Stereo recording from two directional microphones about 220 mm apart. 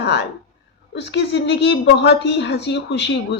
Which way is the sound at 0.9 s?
50° left (ahead or behind).